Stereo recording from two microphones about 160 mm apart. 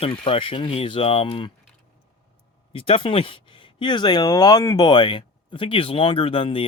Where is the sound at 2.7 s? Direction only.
35° left (ahead or behind).